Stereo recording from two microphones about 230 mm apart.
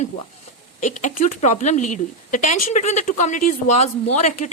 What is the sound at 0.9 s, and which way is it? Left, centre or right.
Speech, left.